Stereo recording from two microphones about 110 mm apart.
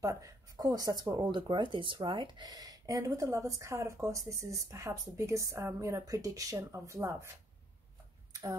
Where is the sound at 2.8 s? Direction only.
30° right (ahead or behind).